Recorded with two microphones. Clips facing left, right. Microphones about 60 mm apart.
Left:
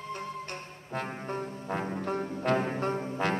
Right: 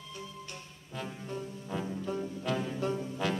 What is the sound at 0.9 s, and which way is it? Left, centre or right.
Brass instrument, left.